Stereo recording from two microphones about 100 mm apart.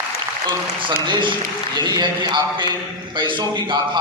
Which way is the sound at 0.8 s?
50° right (ahead or behind).